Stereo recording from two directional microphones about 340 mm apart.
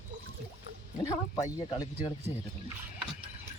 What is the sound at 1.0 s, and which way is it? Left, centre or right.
Speech, centre.